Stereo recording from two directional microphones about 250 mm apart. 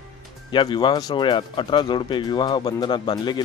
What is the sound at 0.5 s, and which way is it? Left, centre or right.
Speech, centre.